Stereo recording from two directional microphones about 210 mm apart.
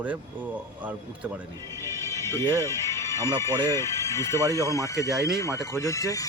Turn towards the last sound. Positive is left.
turn(degrees=15)  # may be behind; listen again after turning